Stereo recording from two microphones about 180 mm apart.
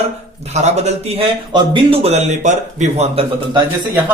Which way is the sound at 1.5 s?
25° right (ahead or behind).